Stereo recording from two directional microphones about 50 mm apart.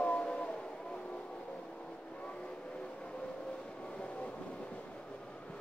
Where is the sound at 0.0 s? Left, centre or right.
Left.